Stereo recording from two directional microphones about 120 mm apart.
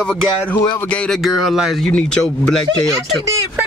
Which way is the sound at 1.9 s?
10° left (ahead or behind).